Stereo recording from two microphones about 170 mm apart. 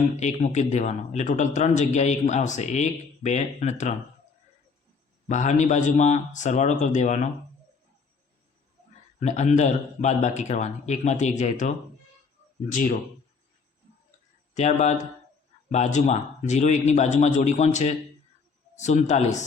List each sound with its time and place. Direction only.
0.2 s speech: 45° left (ahead or behind)
5.3 s speech: 45° left (ahead or behind)
9.2 s speech: 45° left (ahead or behind)
14.5 s speech: 40° left (ahead or behind)